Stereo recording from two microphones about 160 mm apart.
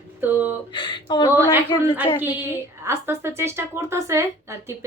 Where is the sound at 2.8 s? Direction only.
15° right (ahead or behind).